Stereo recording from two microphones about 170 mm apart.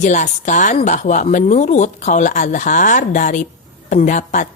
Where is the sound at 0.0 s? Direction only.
45° left (ahead or behind).